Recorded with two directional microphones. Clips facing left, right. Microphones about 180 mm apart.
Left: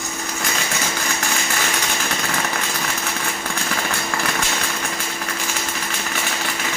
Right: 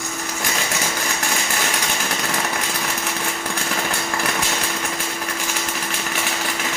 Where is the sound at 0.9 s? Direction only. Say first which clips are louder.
Even; centre (ahead or behind).